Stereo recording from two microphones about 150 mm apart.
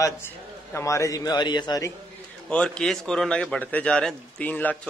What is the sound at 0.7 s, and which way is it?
A man's voice, 20° left (ahead or behind).